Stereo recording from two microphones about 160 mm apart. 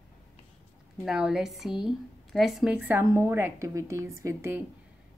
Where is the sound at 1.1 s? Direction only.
5° right (ahead or behind).